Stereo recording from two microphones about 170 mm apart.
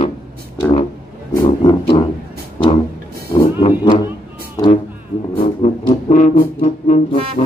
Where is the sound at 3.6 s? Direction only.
35° left (ahead or behind).